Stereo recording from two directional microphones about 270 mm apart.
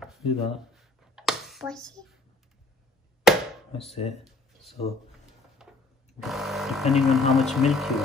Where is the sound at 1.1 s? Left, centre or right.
Centre.